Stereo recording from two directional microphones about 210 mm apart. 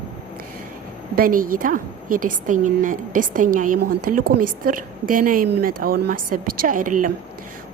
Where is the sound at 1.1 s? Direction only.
40° right (ahead or behind).